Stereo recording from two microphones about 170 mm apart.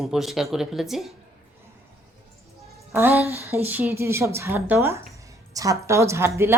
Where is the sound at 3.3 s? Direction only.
20° left (ahead or behind).